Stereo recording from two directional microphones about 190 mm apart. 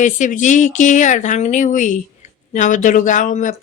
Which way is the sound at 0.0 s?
40° left (ahead or behind).